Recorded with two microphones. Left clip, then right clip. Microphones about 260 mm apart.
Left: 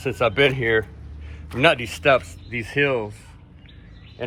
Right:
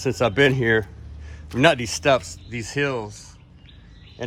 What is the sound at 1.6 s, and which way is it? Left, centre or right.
Speech, right.